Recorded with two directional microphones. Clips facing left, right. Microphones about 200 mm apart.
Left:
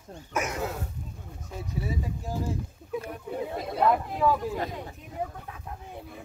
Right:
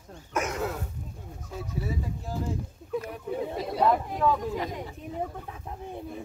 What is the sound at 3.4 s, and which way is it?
Speech, centre (ahead or behind).